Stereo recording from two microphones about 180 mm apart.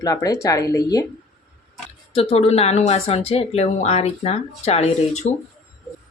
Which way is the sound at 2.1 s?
30° left (ahead or behind).